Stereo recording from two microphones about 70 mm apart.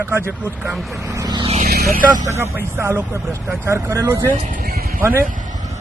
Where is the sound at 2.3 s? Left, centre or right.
Right.